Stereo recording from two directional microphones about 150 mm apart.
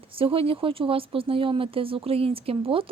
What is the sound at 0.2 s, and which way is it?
Speech, 35° right (ahead or behind).